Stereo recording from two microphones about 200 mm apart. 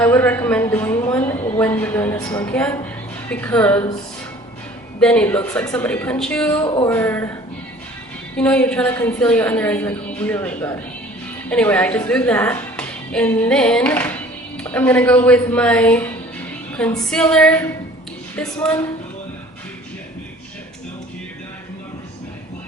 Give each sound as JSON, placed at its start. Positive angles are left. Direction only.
{"t": 0.0, "sound": "a woman's voice", "side_deg": 10}
{"t": 4.9, "sound": "a woman's voice", "side_deg": 5}
{"t": 8.4, "sound": "a woman's voice", "side_deg": 5}